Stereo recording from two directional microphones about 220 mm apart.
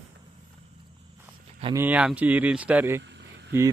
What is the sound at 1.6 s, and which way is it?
Speech, 10° right (ahead or behind).